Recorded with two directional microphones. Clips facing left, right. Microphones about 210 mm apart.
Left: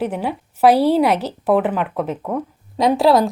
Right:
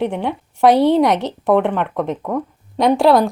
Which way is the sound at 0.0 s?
5° left (ahead or behind).